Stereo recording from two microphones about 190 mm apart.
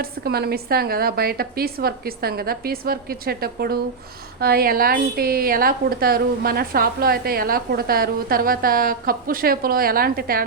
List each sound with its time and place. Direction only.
0.0 s a woman's voice: 55° right (ahead or behind)